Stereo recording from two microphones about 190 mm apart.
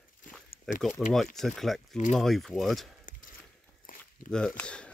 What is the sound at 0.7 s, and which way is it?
Speech, centre (ahead or behind).